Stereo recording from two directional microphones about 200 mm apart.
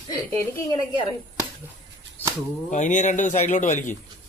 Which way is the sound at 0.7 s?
25° left (ahead or behind).